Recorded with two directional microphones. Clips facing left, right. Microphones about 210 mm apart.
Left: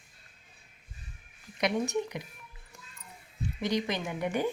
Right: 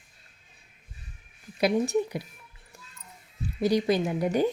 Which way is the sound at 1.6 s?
30° right (ahead or behind).